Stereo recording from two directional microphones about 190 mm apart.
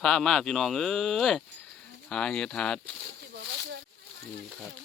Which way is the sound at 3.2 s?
65° right (ahead or behind).